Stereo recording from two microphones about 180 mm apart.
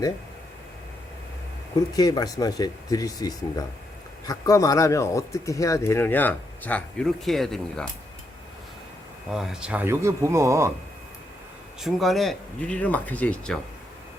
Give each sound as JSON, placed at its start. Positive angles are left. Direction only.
{"t": 1.9, "sound": "speech", "side_deg": 20}
{"t": 9.3, "sound": "speech", "side_deg": -5}
{"t": 11.8, "sound": "speech", "side_deg": 0}